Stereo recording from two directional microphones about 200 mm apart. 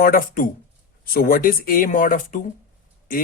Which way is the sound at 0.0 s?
45° left (ahead or behind).